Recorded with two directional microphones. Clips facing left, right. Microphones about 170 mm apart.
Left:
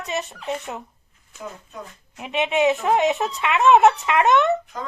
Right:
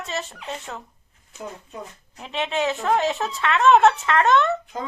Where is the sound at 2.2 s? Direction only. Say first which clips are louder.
Left 4 dB; 15° left (ahead or behind).